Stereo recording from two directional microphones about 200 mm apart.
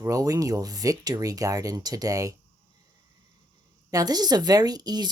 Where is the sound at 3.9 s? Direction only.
20° right (ahead or behind).